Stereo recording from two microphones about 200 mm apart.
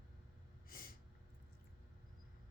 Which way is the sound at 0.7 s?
45° left (ahead or behind).